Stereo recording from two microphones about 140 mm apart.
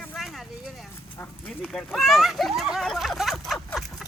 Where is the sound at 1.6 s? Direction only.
Centre (ahead or behind).